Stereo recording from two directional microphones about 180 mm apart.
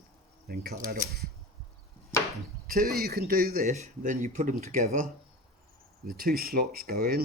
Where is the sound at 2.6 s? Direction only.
55° right (ahead or behind).